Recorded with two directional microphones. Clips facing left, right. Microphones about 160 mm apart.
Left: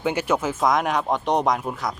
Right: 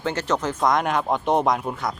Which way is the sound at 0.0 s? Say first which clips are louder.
Left 2 dB; 10° left (ahead or behind).